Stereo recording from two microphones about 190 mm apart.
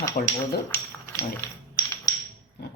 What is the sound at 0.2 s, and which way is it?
Speech, 35° left (ahead or behind).